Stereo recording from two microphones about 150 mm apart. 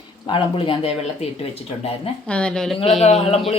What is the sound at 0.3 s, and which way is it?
Speech, 35° left (ahead or behind).